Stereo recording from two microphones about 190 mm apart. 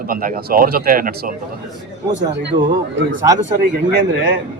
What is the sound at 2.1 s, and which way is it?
Speech, 70° right (ahead or behind).